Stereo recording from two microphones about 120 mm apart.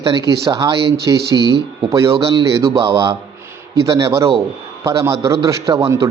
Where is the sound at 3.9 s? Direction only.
25° right (ahead or behind).